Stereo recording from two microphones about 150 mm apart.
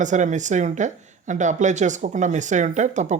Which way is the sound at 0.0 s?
55° right (ahead or behind).